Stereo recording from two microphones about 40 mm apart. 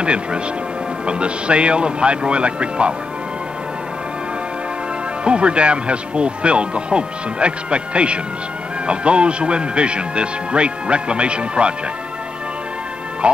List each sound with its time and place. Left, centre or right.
0.0 s speech: right
5.2 s speech: right
13.2 s speech: right